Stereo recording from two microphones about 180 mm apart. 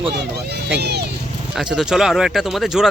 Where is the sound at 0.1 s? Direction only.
65° right (ahead or behind).